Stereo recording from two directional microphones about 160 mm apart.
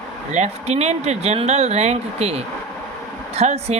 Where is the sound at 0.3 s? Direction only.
45° right (ahead or behind).